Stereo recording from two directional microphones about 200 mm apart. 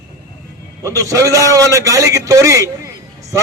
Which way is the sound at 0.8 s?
15° right (ahead or behind).